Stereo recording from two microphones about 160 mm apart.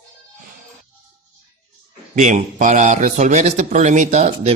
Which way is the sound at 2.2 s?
50° right (ahead or behind).